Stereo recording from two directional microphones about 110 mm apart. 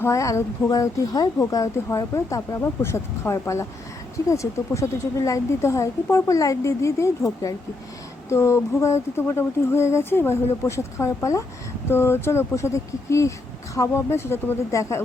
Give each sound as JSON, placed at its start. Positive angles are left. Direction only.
{"t": 0.0, "sound": "speech", "side_deg": 30}